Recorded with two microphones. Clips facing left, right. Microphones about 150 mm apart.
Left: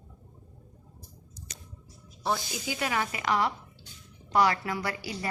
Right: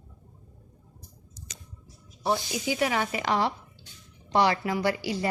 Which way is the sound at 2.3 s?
20° right (ahead or behind).